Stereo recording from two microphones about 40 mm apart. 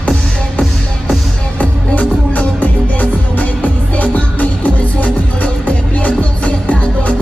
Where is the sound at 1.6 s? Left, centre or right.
Left.